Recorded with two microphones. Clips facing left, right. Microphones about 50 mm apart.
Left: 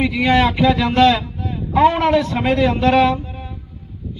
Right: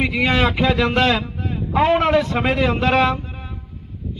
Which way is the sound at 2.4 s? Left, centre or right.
Right.